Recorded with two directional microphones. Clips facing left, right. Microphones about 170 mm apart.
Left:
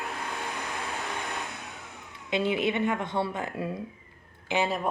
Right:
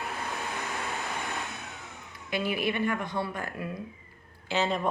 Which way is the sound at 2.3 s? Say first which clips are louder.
Left 3 dB; 25° left (ahead or behind).